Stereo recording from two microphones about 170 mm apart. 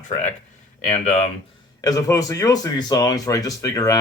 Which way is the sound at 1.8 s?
20° left (ahead or behind).